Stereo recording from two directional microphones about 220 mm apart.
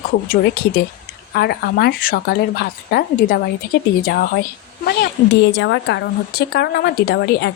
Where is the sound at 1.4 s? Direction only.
45° left (ahead or behind).